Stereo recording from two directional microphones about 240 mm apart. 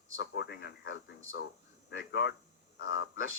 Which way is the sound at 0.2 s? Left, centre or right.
Left.